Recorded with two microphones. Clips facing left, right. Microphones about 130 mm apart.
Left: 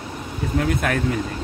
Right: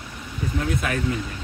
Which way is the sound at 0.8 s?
55° left (ahead or behind).